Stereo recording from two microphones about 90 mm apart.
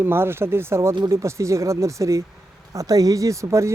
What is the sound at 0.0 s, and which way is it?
Speech, 25° right (ahead or behind).